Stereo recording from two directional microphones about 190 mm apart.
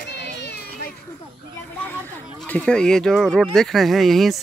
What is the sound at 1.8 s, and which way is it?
Speech, 10° left (ahead or behind).